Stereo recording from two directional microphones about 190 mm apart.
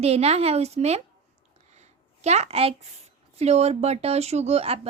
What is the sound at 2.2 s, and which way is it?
A child's voice, 35° right (ahead or behind).